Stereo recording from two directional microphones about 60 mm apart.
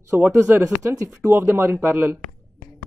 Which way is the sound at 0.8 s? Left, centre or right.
Right.